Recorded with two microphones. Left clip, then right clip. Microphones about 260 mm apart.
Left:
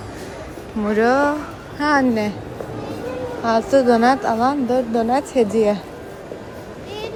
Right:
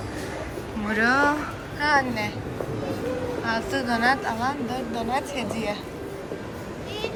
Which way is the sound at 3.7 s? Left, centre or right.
Left.